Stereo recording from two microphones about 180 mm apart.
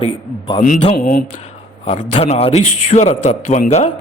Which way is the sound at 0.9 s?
55° left (ahead or behind).